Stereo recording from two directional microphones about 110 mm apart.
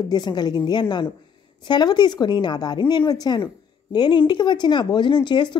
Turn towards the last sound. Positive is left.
turn(degrees=45)  # may be behind; listen again after turning